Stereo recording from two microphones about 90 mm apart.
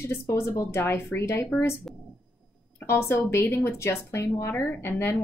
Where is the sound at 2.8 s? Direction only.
30° left (ahead or behind).